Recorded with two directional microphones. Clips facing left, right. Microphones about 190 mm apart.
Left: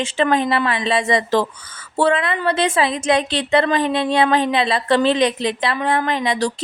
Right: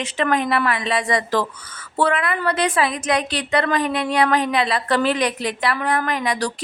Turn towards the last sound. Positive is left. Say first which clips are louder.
# left 3 dB
turn(degrees=25)  # may be behind; listen again after turning